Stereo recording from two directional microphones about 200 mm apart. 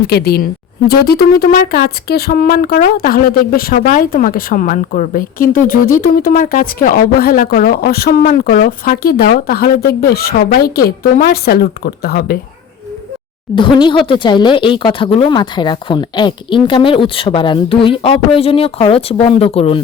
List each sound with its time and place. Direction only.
0.0 s speech: 50° left (ahead or behind)
13.6 s speech: 25° left (ahead or behind)